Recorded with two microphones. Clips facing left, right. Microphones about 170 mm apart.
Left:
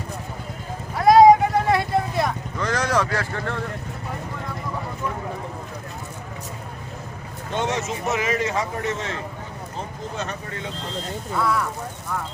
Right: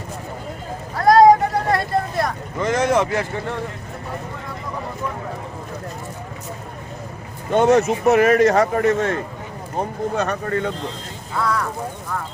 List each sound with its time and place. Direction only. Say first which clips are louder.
0.9 s vehicle: even; centre (ahead or behind)
2.6 s speech: right 5 dB; 25° right (ahead or behind)
7.5 s speech: right 10 dB; 50° right (ahead or behind)
11.3 s speech: right 1 dB; centre (ahead or behind)